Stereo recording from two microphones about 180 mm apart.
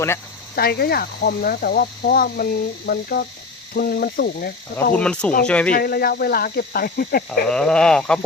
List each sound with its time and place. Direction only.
0.5 s speech: 60° left (ahead or behind)
4.9 s speech: 5° left (ahead or behind)
5.7 s speech: 55° left (ahead or behind)
7.4 s speech: 5° left (ahead or behind)